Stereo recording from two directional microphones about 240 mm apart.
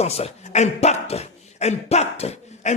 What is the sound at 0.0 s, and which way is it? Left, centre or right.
Speech, left.